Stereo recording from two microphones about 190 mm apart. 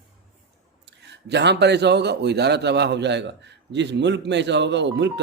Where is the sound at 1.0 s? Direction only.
65° right (ahead or behind).